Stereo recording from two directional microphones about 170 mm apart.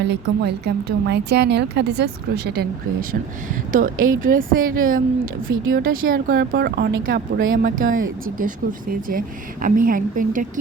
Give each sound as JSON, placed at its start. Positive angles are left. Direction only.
{"t": 0.0, "sound": "a woman's voice", "side_deg": -80}
{"t": 3.7, "sound": "a woman's voice", "side_deg": -50}
{"t": 7.1, "sound": "a woman's voice", "side_deg": -55}